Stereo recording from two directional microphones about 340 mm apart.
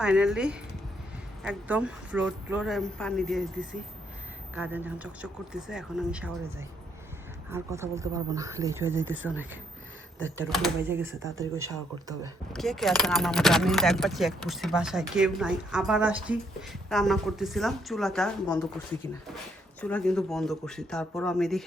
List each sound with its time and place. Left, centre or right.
0.0 s speech: centre
4.5 s speech: centre
7.5 s speech: centre
10.2 s speech: right
10.5 s speech: centre
12.5 s speech: centre
19.8 s speech: centre